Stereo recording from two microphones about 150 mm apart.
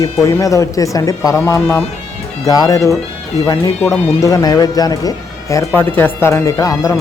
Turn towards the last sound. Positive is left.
turn(degrees=25)  # may be behind; listen again after turning